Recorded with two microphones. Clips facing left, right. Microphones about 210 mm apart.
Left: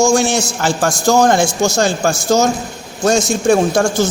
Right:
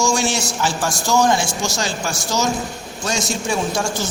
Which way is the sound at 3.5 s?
50° left (ahead or behind).